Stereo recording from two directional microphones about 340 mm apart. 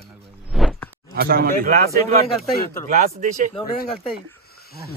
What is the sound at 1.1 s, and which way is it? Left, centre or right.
Speech, right.